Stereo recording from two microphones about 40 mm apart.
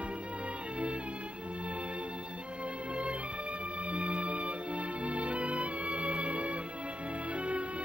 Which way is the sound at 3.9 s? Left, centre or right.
Right.